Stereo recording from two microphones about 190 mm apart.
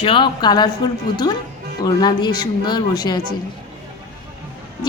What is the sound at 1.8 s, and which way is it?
A woman's voice, 20° left (ahead or behind).